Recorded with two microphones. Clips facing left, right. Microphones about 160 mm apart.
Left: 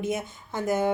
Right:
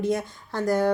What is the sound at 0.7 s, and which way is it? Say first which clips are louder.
Speech: right 2 dB; 20° left (ahead or behind).